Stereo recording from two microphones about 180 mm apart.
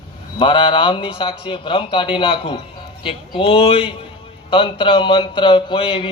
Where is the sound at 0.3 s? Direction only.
25° left (ahead or behind).